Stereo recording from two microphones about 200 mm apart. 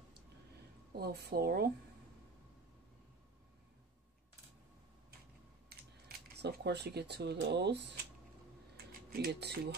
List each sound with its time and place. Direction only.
0.9 s a woman's voice: 50° right (ahead or behind)
6.3 s speech: 55° right (ahead or behind)
9.1 s a woman's voice: 55° right (ahead or behind)